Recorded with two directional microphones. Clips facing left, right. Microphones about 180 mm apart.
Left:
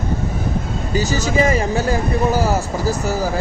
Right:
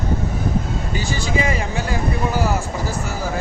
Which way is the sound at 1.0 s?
40° left (ahead or behind).